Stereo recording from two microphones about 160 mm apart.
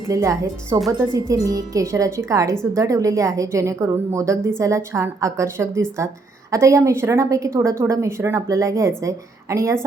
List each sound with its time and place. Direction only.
0.1 s a woman's voice: 20° right (ahead or behind)